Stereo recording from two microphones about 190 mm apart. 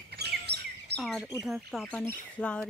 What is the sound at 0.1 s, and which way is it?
Bird vocalization, 60° right (ahead or behind).